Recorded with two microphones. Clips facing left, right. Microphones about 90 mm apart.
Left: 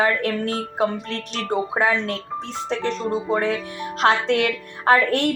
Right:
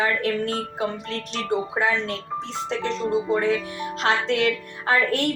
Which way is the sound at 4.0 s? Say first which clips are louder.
Left 3 dB; 50° left (ahead or behind).